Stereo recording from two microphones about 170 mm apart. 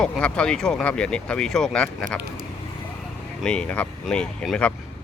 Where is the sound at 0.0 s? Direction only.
5° left (ahead or behind).